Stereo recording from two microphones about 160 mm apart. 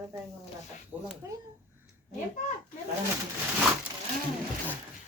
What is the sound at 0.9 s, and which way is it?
Speech, 10° right (ahead or behind).